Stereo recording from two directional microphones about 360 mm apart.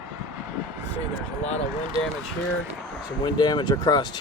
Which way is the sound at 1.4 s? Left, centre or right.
Centre.